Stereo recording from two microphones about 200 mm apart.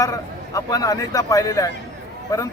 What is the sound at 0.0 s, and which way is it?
Speech, 15° left (ahead or behind).